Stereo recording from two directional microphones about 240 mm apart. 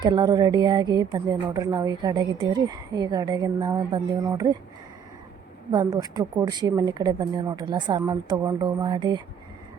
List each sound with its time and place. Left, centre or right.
0.0 s a woman's voice: centre
5.7 s a woman's voice: centre